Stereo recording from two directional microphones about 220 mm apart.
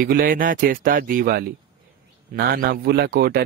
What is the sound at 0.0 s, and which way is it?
A man's voice, 40° right (ahead or behind).